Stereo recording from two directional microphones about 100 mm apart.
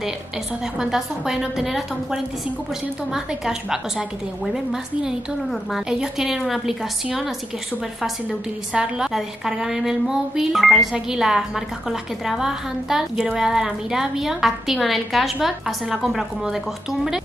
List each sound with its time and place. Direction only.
0.7 s a woman's voice: 5° right (ahead or behind)
5.5 s a woman's voice: centre (ahead or behind)